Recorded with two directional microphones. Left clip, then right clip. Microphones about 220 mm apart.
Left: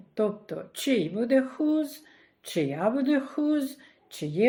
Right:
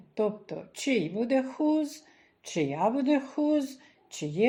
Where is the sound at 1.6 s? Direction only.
15° left (ahead or behind).